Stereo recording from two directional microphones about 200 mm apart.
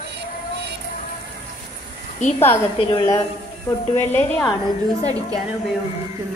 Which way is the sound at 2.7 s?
25° left (ahead or behind).